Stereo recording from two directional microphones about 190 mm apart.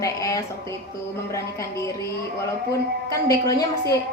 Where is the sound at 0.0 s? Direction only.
20° left (ahead or behind).